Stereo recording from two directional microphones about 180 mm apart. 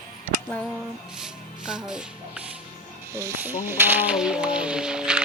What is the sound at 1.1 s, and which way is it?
Speech, 5° right (ahead or behind).